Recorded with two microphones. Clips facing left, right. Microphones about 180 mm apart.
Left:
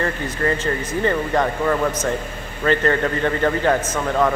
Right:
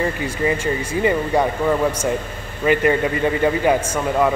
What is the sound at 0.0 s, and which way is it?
Speech, 10° right (ahead or behind).